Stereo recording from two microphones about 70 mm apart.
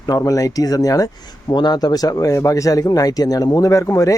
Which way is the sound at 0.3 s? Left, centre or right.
Left.